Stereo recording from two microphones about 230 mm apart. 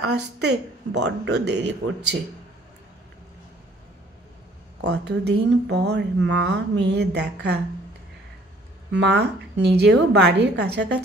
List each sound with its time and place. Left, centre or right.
0.0 s speech: right
4.8 s speech: right
8.9 s speech: right